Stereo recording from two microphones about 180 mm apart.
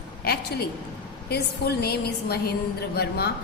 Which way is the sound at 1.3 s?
65° left (ahead or behind).